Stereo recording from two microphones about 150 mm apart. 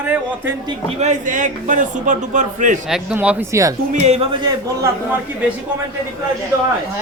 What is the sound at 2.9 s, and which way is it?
Speech, 5° right (ahead or behind).